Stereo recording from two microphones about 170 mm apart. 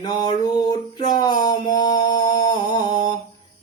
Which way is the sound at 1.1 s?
25° left (ahead or behind).